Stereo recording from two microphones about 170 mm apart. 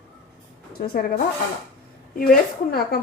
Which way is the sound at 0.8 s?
65° left (ahead or behind).